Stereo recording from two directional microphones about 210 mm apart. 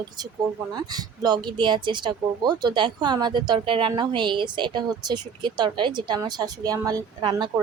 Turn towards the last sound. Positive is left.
turn(degrees=-20)  # may be behind; listen again after turning